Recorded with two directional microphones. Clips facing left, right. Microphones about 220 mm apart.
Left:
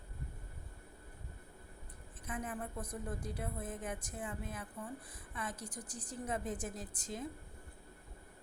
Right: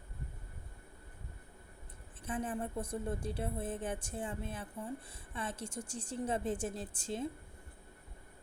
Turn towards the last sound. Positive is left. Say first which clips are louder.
# right 5 dB
turn(degrees=-30)  # may be behind; listen again after turning